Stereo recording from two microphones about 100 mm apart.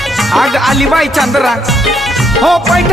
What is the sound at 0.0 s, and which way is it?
Speech, centre (ahead or behind).